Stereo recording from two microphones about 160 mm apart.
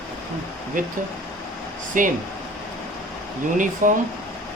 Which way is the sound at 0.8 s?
55° right (ahead or behind).